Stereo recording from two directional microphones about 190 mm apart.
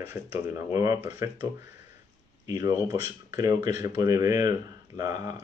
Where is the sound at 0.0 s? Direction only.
10° right (ahead or behind).